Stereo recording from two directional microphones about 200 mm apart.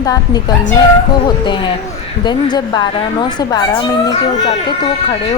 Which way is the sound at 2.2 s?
20° left (ahead or behind).